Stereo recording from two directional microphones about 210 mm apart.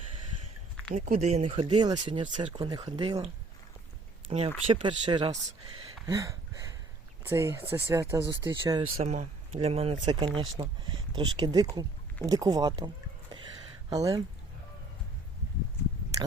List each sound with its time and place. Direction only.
0.9 s speech: 35° right (ahead or behind); by 3.2 s 20° right (ahead or behind)
4.3 s speech: 30° right (ahead or behind)
6.1 s a sound: 15° right (ahead or behind)
7.3 s speech: 10° right (ahead or behind)
9.0 s speech: 30° right (ahead or behind)
13.9 s speech: 15° right (ahead or behind)